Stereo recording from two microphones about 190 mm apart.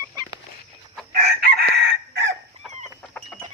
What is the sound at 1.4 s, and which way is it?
Chicken, 55° right (ahead or behind).